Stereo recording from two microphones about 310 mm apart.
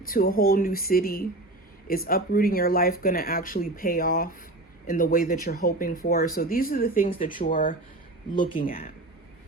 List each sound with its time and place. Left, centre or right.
0.0 s speech: left
8.6 s speech: left